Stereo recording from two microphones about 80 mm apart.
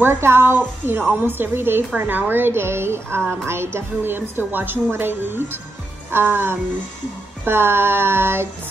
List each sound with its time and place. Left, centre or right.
0.0 s a woman's voice: right